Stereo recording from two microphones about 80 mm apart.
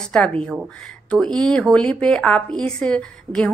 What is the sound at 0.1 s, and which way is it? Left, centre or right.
A woman's voice, centre.